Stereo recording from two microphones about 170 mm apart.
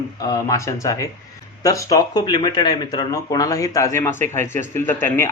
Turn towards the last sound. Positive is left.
turn(degrees=15)  # may be behind; listen again after turning